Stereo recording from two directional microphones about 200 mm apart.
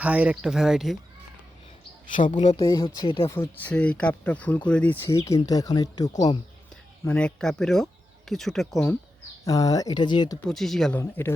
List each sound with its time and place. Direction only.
0.0 s speech: 5° right (ahead or behind)
2.1 s speech: 40° left (ahead or behind)
2.6 s speech: 15° left (ahead or behind)
3.2 s speech: 10° left (ahead or behind)
7.0 s speech: 5° left (ahead or behind)
9.4 s speech: 20° left (ahead or behind)
10.4 s speech: centre (ahead or behind)